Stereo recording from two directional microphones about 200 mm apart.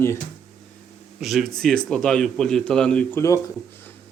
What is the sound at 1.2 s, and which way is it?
A man's voice, centre (ahead or behind).